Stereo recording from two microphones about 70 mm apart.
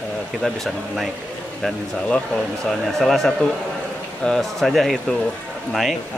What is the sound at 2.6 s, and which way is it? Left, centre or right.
Speech, centre.